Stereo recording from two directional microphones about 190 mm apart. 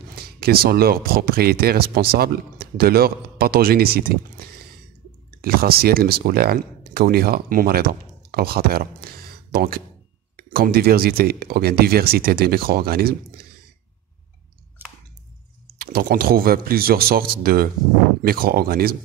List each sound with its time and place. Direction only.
0.1 s speech: 55° right (ahead or behind)
5.4 s speech: 55° right (ahead or behind)
15.8 s speech: 55° right (ahead or behind)